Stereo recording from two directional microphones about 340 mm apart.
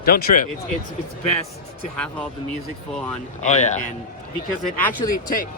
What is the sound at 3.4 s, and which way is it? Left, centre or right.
Speech, centre.